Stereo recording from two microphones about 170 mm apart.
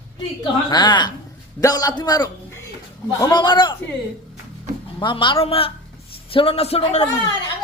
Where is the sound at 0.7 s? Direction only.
25° left (ahead or behind).